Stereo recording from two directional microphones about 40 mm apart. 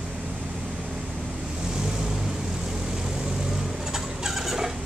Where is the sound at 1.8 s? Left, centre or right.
Centre.